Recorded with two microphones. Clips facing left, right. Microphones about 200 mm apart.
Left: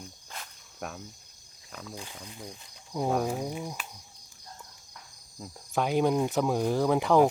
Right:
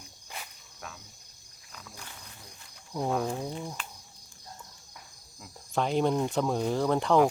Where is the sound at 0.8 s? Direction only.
55° left (ahead or behind).